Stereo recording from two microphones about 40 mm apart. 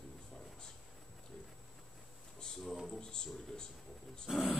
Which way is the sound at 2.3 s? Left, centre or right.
Centre.